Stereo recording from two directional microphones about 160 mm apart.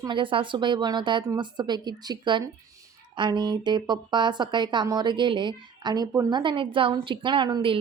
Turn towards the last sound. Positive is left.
turn(degrees=-30)  # may be behind; listen again after turning